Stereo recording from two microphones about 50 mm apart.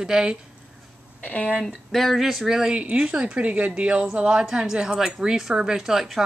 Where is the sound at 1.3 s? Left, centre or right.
Left.